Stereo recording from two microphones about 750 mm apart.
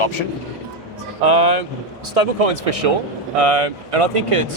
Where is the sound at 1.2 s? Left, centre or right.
Right.